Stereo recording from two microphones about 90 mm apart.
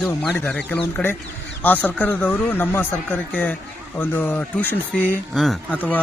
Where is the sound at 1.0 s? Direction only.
5° left (ahead or behind).